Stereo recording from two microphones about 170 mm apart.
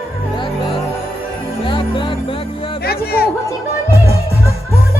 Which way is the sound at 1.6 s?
30° left (ahead or behind).